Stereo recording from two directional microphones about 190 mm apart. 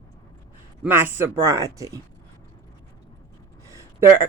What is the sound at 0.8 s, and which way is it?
Speech, 10° right (ahead or behind).